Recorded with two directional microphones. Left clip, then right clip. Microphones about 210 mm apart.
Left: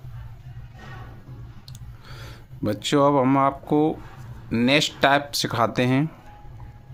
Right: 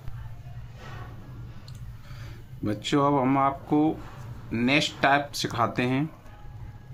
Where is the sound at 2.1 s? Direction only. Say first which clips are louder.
Left 6 dB; 50° left (ahead or behind).